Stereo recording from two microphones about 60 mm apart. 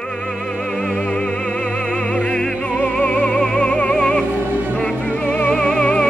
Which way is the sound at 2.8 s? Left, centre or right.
Left.